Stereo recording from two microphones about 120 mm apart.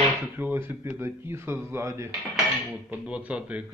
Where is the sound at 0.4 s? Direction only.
15° right (ahead or behind).